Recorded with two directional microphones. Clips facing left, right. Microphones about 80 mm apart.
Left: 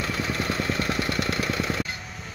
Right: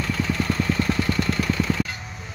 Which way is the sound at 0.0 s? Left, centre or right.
Left.